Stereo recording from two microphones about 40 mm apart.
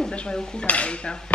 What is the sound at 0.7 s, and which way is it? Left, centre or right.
Dishes, left.